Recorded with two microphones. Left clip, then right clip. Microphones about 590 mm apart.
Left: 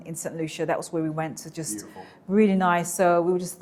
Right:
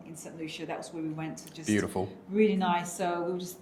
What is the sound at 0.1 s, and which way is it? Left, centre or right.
A woman's voice, left.